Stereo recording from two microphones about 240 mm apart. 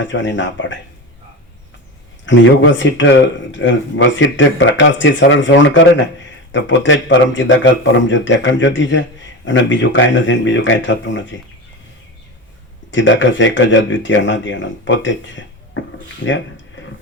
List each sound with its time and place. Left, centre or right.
0.0 s a man's voice: left
2.2 s a man's voice: left
12.9 s a man's voice: left
16.8 s a sound: left